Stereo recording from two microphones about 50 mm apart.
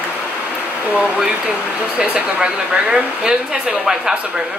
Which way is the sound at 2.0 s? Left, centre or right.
Right.